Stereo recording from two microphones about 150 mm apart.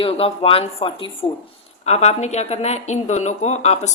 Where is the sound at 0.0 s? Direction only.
40° left (ahead or behind).